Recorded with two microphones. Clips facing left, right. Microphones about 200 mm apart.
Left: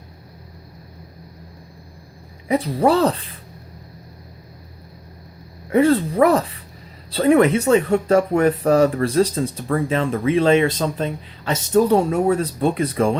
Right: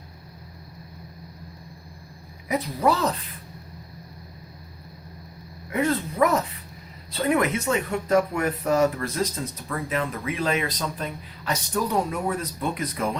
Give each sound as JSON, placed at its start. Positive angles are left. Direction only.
{"t": 2.5, "sound": "speech", "side_deg": 30}
{"t": 5.7, "sound": "speech", "side_deg": 30}